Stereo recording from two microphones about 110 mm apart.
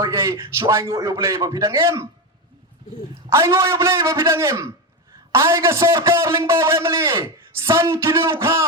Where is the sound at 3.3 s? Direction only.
25° right (ahead or behind).